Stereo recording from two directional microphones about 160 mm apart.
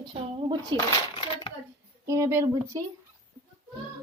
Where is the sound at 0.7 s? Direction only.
30° right (ahead or behind).